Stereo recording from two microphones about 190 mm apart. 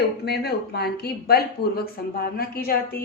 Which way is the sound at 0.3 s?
60° left (ahead or behind).